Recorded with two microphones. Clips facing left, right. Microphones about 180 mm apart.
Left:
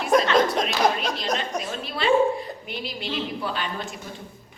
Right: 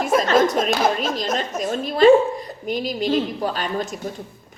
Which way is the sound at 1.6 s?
45° right (ahead or behind).